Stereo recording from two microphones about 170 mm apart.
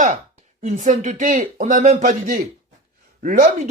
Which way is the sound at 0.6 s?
45° right (ahead or behind).